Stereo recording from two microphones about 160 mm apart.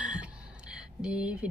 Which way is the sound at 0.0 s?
5° right (ahead or behind).